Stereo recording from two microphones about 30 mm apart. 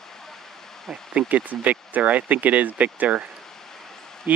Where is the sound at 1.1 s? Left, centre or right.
Right.